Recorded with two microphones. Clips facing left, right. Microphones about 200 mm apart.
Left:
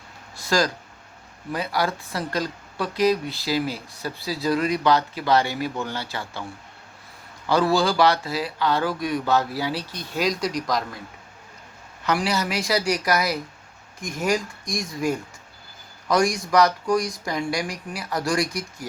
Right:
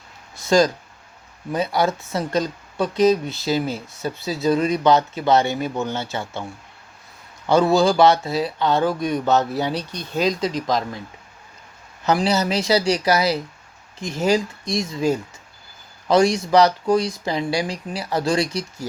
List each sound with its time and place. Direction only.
0.4 s speech: 20° right (ahead or behind)
7.4 s speech: 20° right (ahead or behind)
12.1 s speech: 25° right (ahead or behind)